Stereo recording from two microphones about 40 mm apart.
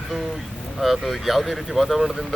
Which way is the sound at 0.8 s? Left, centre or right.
Centre.